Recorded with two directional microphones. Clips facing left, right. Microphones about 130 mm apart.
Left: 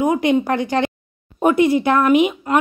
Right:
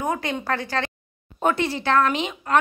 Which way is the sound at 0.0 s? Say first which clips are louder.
Left 10 dB; 15° left (ahead or behind).